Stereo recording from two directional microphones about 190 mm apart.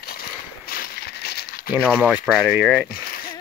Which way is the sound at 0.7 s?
55° left (ahead or behind).